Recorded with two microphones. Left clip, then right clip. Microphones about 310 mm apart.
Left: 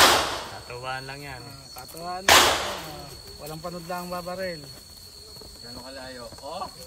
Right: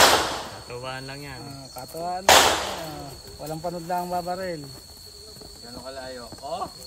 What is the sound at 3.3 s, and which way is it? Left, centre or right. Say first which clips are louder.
Speech: right 5 dB; right.